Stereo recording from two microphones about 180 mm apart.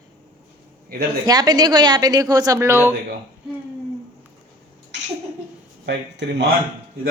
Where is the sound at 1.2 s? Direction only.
20° right (ahead or behind).